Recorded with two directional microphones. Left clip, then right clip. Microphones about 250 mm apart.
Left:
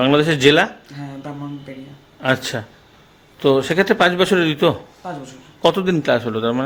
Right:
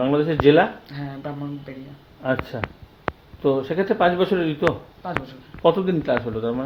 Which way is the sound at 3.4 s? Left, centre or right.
Left.